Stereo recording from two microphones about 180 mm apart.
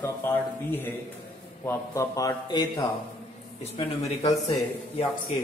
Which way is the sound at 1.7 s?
15° left (ahead or behind).